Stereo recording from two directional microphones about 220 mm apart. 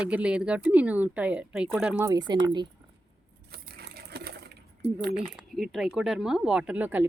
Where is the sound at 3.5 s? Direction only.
45° right (ahead or behind).